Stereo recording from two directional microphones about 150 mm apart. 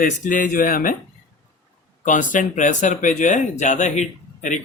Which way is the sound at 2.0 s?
55° left (ahead or behind).